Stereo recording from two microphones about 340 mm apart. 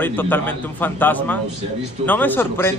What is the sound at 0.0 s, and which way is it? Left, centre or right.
A man's voice, centre.